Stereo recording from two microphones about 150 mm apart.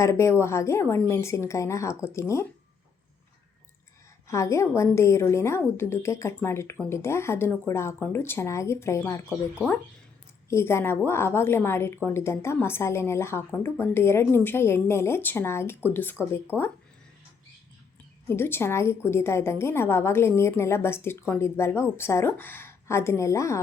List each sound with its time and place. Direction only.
0.0 s a woman's voice: 20° left (ahead or behind)
4.3 s a woman's voice: 20° left (ahead or behind)
10.5 s a woman's voice: 15° left (ahead or behind)
18.3 s a woman's voice: 15° left (ahead or behind)